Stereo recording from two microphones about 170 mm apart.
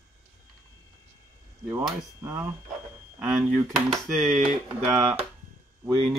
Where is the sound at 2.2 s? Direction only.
15° right (ahead or behind).